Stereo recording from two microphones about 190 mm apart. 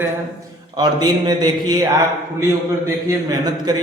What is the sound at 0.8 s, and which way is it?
A man's voice, 20° right (ahead or behind).